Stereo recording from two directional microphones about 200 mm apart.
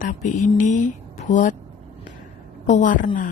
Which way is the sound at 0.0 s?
40° left (ahead or behind).